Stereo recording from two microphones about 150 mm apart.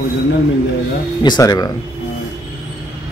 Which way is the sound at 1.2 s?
25° left (ahead or behind).